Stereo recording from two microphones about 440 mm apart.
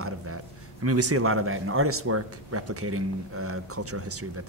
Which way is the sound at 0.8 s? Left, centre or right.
Right.